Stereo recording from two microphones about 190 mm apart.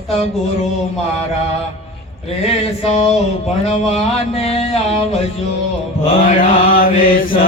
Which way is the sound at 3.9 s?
30° left (ahead or behind).